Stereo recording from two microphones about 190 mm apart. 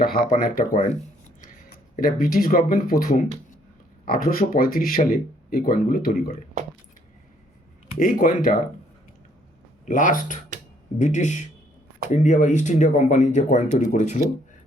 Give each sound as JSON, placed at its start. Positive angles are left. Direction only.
{"t": 0.0, "sound": "speech", "side_deg": 45}
{"t": 2.2, "sound": "speech", "side_deg": 50}
{"t": 7.9, "sound": "speech", "side_deg": 45}
{"t": 9.8, "sound": "speech", "side_deg": 45}